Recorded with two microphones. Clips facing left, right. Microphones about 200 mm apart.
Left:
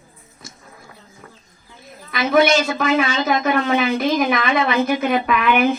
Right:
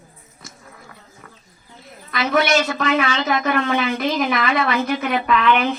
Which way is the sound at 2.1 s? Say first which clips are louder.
Left 3 dB; 20° left (ahead or behind).